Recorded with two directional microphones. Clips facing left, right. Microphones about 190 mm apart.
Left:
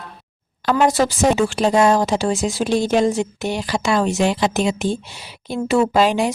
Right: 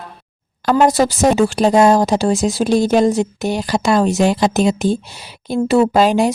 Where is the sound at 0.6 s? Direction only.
40° right (ahead or behind).